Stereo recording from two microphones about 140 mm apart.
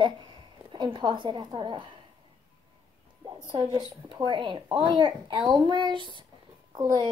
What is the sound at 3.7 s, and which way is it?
A child's voice, 35° right (ahead or behind).